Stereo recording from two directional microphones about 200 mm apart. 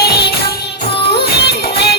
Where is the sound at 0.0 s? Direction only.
55° left (ahead or behind).